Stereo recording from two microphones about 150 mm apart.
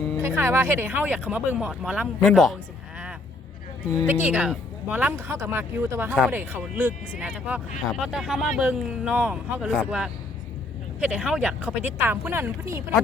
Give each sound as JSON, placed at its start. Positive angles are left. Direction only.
{"t": 0.2, "sound": "speech", "side_deg": -15}
{"t": 4.0, "sound": "speech", "side_deg": -10}